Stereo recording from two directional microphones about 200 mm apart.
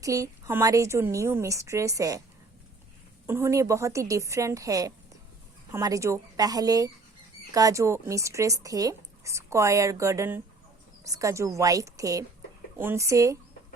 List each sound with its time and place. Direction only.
0.0 s speech: 15° right (ahead or behind)
3.2 s speech: 15° right (ahead or behind)